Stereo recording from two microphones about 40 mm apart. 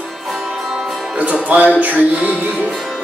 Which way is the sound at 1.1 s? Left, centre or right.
Right.